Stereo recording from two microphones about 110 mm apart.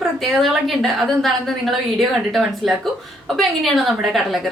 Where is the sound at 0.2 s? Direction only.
Centre (ahead or behind).